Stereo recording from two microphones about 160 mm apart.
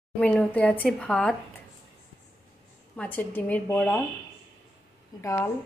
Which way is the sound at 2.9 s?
10° left (ahead or behind).